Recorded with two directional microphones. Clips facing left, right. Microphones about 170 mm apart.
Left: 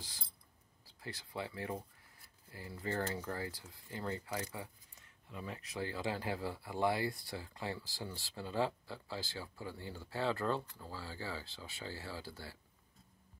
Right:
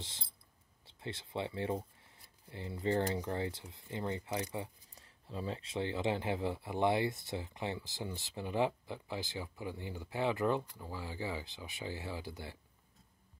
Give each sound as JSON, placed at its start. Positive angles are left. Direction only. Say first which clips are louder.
{"t": 0.0, "sound": "a sound", "louder": "right 4 dB", "side_deg": -25}
{"t": 0.8, "sound": "speech", "louder": "right 4 dB", "side_deg": -25}
{"t": 3.3, "sound": "speech", "louder": "right 5 dB", "side_deg": -25}